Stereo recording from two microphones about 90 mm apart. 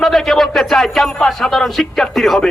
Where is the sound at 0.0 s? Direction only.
5° left (ahead or behind).